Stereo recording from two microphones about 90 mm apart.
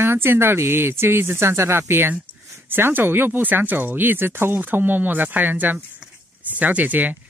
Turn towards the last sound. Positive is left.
turn(degrees=-20)  # may be behind; listen again after turning